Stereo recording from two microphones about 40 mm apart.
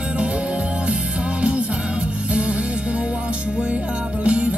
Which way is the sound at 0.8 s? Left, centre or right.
Right.